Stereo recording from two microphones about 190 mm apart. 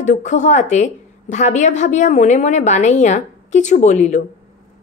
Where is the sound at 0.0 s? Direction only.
40° left (ahead or behind).